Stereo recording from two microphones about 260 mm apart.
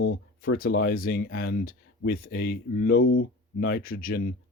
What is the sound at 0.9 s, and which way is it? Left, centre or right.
Speech, left.